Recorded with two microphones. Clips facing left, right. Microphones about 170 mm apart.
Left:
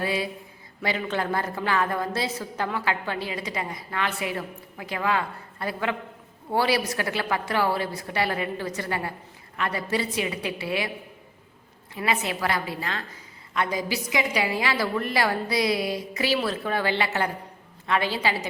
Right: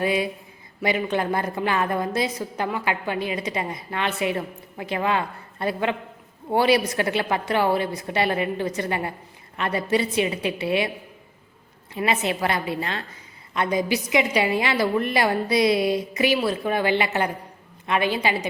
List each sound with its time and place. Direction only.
0.0 s a woman's voice: 20° right (ahead or behind)
11.9 s a woman's voice: 25° right (ahead or behind)